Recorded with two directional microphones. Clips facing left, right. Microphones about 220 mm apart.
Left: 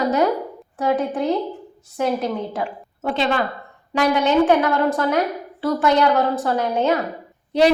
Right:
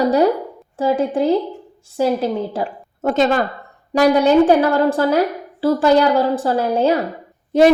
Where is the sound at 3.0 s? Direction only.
45° right (ahead or behind).